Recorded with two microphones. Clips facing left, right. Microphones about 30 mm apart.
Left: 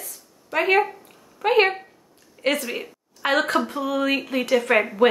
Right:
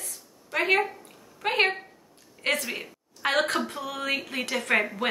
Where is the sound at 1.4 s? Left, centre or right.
Centre.